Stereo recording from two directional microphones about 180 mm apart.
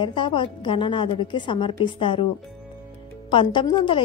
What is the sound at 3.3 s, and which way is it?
Speech, 25° left (ahead or behind).